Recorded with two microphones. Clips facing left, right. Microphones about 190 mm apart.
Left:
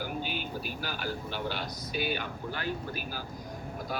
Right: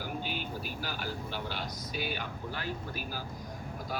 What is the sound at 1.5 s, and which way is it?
Speech, 65° left (ahead or behind).